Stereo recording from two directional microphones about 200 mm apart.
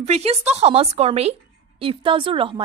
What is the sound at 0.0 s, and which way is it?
A woman's voice, 30° right (ahead or behind).